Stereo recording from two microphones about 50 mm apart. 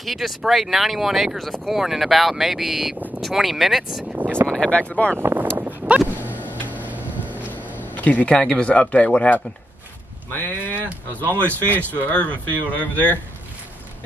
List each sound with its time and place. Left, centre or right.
0.0 s speech: centre
4.0 s vehicle: right
4.5 s speech: left
5.1 s speech: right
6.2 s music: right
7.8 s a sound: left
8.4 s speech: left
10.3 s speech: left